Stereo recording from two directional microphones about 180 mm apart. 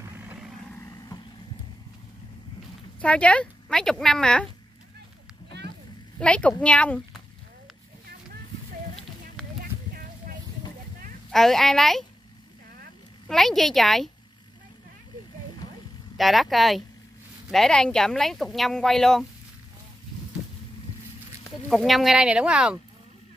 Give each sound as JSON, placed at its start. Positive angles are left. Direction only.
{"t": 0.0, "sound": "vehicle", "side_deg": -15}
{"t": 0.7, "sound": "vehicle", "side_deg": 15}
{"t": 3.0, "sound": "speech", "side_deg": 5}
{"t": 6.1, "sound": "a woman's voice", "side_deg": 5}
{"t": 11.3, "sound": "speech", "side_deg": 0}
{"t": 13.3, "sound": "speech", "side_deg": 0}
{"t": 16.2, "sound": "speech", "side_deg": 0}
{"t": 21.5, "sound": "speech", "side_deg": 0}